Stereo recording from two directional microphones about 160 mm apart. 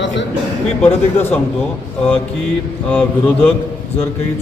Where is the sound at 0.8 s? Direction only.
15° left (ahead or behind).